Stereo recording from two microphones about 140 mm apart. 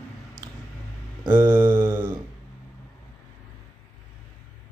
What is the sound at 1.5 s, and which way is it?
Mantra, 15° right (ahead or behind).